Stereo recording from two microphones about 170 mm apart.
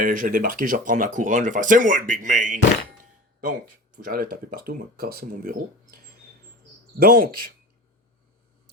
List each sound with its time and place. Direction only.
0.0 s speech: 55° right (ahead or behind)
3.9 s speech: 55° right (ahead or behind)
7.0 s speech: 60° right (ahead or behind)